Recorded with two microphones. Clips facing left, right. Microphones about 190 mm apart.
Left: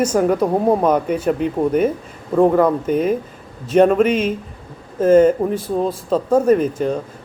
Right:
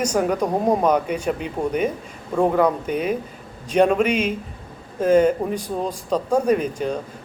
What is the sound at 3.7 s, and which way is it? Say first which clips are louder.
Speech: left 4 dB; 5° left (ahead or behind).